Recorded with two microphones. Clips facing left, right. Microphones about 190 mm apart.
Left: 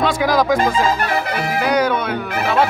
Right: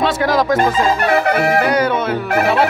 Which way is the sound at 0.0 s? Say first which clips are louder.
Right 1 dB; centre (ahead or behind).